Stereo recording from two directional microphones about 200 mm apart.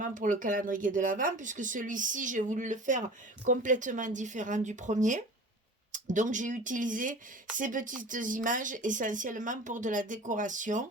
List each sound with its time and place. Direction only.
0.0 s speech: 40° right (ahead or behind)